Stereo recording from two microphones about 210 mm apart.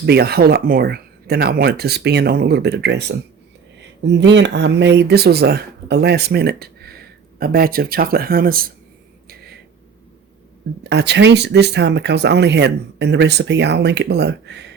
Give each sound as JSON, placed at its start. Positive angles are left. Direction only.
{"t": 0.0, "sound": "speech", "side_deg": -50}
{"t": 10.8, "sound": "speech", "side_deg": -55}